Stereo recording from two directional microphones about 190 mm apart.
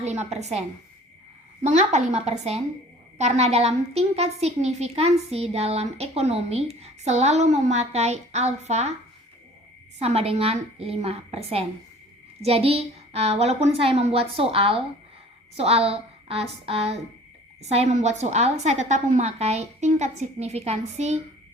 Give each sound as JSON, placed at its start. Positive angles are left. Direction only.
{"t": 0.0, "sound": "a woman's voice", "side_deg": -35}
{"t": 1.6, "sound": "a woman's voice", "side_deg": -35}
{"t": 10.0, "sound": "a woman's voice", "side_deg": -35}